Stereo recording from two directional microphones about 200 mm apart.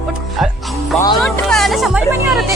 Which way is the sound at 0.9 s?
20° left (ahead or behind).